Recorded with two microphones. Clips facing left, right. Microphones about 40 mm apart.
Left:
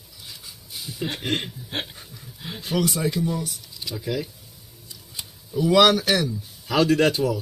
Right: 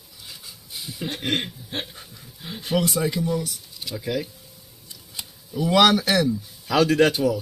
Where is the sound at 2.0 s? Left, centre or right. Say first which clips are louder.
Left 1 dB; centre.